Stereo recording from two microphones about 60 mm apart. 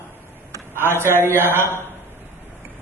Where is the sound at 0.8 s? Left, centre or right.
Right.